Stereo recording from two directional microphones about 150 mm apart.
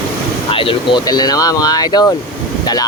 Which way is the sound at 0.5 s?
35° left (ahead or behind).